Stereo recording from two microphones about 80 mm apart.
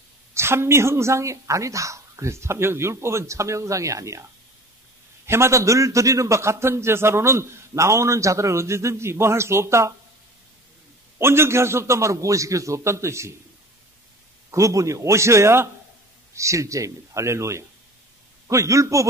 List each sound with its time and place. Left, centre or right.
0.3 s a man's voice: right
5.2 s a man's voice: right
11.1 s a man's voice: right
14.5 s a man's voice: right